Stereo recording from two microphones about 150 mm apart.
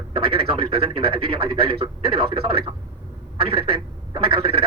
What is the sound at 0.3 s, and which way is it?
Speech, 40° right (ahead or behind).